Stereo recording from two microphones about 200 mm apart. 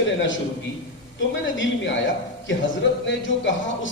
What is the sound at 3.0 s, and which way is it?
Speech, 65° left (ahead or behind).